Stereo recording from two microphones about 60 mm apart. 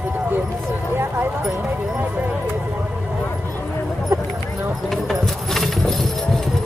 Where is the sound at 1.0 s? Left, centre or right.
Right.